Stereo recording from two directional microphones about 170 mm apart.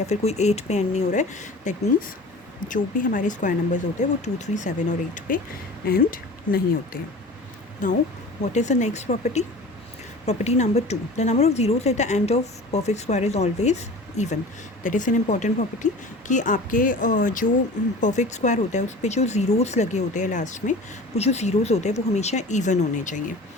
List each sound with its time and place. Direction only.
0.0 s a woman's voice: 40° left (ahead or behind)
5.9 s speech: 60° left (ahead or behind)
7.8 s a woman's voice: 50° left (ahead or behind)